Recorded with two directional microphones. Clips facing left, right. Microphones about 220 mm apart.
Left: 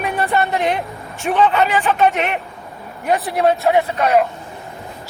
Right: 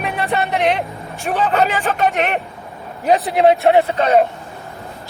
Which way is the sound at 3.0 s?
25° right (ahead or behind).